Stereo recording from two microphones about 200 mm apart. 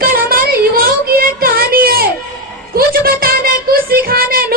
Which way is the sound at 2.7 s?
45° right (ahead or behind).